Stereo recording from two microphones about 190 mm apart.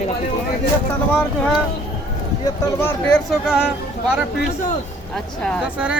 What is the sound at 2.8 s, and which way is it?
Speech, 15° left (ahead or behind).